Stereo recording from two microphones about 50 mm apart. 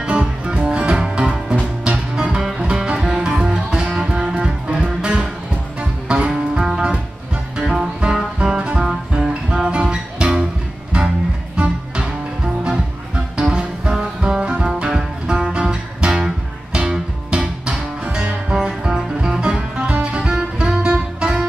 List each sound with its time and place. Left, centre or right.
0.5 s music: right